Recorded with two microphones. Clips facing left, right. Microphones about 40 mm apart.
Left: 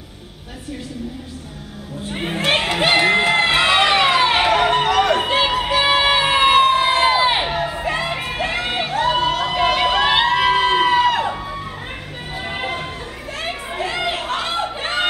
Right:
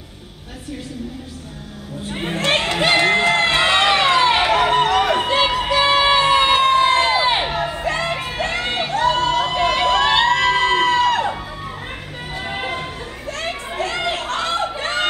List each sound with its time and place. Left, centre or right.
2.0 s crowd: centre
12.4 s run: centre
13.4 s a sound: centre